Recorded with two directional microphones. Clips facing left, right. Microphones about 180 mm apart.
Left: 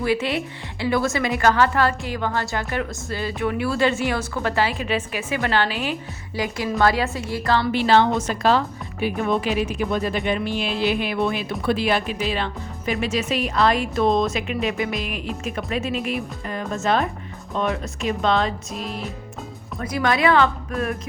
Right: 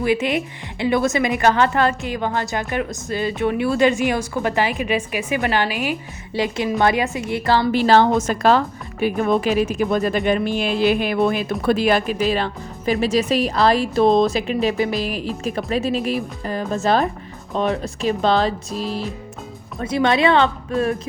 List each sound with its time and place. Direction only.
0.0 s a woman's voice: 15° right (ahead or behind)
6.3 s a woman's voice: 25° right (ahead or behind)
7.7 s a woman's voice: 40° right (ahead or behind)